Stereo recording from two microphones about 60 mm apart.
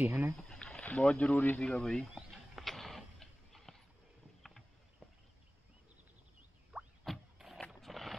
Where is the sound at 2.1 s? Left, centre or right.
Centre.